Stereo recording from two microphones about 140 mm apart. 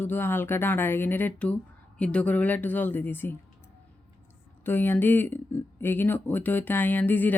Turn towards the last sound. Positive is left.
turn(degrees=15)  # may be behind; listen again after turning